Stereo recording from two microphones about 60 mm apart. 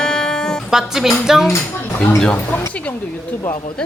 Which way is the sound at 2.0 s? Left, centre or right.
Centre.